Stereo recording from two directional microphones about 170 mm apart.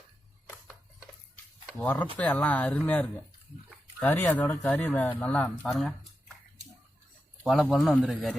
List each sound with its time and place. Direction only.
1.8 s speech: 10° left (ahead or behind)
7.4 s a man's voice: centre (ahead or behind)